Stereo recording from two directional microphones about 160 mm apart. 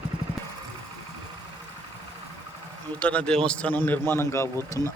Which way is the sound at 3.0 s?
10° left (ahead or behind).